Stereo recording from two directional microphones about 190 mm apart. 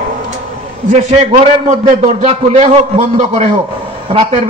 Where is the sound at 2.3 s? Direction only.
30° right (ahead or behind).